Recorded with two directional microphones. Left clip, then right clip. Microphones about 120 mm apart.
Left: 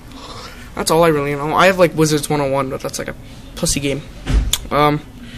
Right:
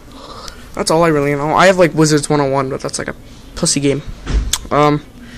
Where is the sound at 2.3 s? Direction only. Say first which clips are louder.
Right 3 dB; 30° right (ahead or behind).